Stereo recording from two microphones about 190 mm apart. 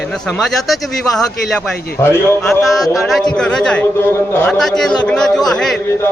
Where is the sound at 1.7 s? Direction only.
55° left (ahead or behind).